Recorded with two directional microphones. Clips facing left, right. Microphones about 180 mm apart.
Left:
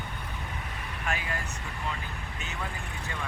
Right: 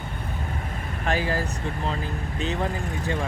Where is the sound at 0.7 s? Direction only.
40° right (ahead or behind).